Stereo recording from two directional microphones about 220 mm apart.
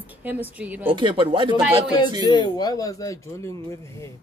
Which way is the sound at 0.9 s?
20° right (ahead or behind).